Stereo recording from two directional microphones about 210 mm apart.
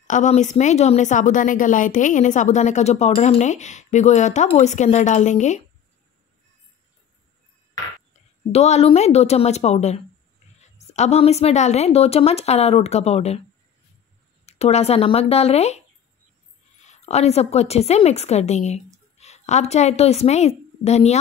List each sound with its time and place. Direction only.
0.0 s a woman's voice: 35° left (ahead or behind)
8.5 s a woman's voice: 30° left (ahead or behind)
14.4 s a woman's voice: 30° left (ahead or behind)